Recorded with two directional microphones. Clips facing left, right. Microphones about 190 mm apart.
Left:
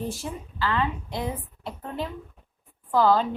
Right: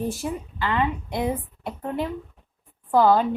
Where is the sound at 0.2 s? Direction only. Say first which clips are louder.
Right 3 dB; 15° right (ahead or behind).